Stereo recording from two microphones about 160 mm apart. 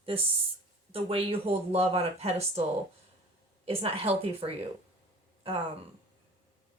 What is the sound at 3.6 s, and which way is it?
Speech, 35° right (ahead or behind).